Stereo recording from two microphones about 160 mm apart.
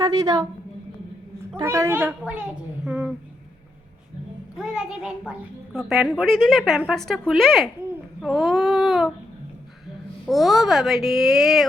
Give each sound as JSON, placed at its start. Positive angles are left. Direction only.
{"t": 0.0, "sound": "a woman's voice", "side_deg": -25}
{"t": 1.6, "sound": "a child's voice", "side_deg": -15}
{"t": 4.5, "sound": "a child's voice", "side_deg": -5}
{"t": 8.2, "sound": "a sound", "side_deg": 0}
{"t": 10.2, "sound": "a child's voice", "side_deg": 0}